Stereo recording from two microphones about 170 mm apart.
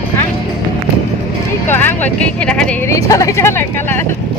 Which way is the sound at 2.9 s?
20° left (ahead or behind).